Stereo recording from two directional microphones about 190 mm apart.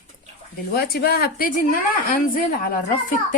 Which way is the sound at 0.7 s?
55° left (ahead or behind).